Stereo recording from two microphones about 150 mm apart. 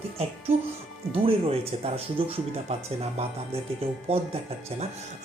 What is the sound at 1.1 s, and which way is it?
Speech, 40° right (ahead or behind).